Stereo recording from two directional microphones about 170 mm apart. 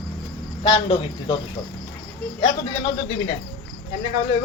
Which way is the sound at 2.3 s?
25° left (ahead or behind).